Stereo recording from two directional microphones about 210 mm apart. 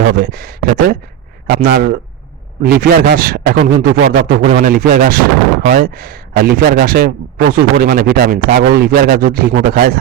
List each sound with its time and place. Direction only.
0.1 s a man's voice: 45° right (ahead or behind)